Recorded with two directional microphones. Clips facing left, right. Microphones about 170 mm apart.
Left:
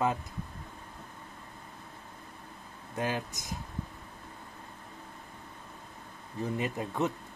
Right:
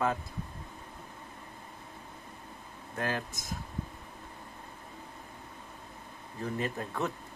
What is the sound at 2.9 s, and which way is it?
Speech, 15° left (ahead or behind).